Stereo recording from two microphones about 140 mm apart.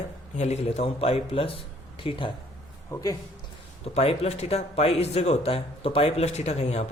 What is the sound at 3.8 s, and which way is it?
Speech, 45° left (ahead or behind).